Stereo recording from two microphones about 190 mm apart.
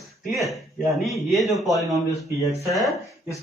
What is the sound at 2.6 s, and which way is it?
Speech, 15° left (ahead or behind).